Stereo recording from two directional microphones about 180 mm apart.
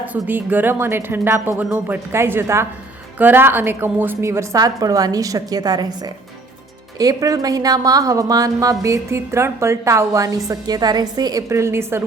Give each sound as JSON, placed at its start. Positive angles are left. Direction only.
{"t": 0.0, "sound": "a woman's voice", "side_deg": -10}